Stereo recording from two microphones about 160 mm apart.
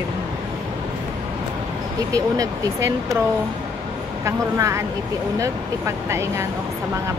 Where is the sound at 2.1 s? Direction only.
20° right (ahead or behind).